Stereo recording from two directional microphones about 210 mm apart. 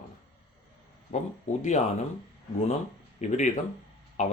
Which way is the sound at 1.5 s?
35° left (ahead or behind).